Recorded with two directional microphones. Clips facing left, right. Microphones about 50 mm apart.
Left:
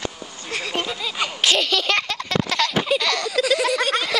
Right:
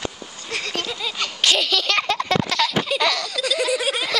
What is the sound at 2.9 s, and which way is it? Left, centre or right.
Baby laughter, centre.